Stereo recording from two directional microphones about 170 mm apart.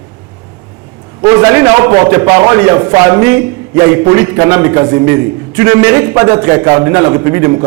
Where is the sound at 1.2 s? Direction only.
20° right (ahead or behind).